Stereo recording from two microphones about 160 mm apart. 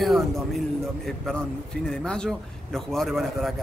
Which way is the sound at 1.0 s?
Centre (ahead or behind).